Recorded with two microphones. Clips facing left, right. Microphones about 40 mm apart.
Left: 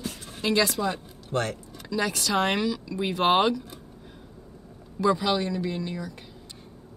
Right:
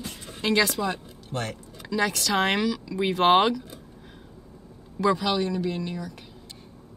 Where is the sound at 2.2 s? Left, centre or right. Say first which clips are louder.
Left 1 dB; right.